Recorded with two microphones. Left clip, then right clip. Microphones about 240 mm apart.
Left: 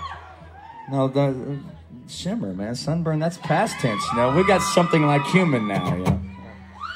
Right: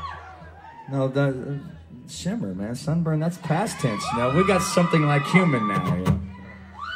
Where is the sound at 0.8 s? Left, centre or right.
Left.